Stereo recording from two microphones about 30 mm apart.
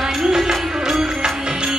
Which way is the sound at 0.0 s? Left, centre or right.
Centre.